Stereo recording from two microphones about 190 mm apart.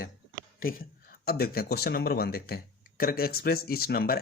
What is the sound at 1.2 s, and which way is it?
Speech, 55° left (ahead or behind).